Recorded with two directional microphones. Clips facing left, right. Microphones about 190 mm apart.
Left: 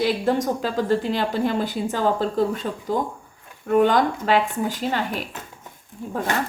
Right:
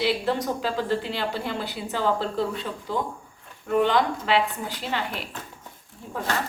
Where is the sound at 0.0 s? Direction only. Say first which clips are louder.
Left 4 dB; 45° left (ahead or behind).